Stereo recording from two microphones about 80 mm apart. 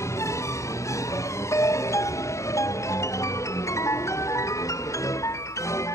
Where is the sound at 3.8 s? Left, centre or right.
Left.